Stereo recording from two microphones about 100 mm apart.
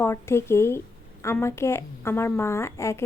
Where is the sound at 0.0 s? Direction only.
25° left (ahead or behind).